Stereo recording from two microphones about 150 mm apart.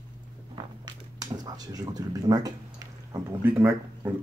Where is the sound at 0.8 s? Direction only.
25° right (ahead or behind).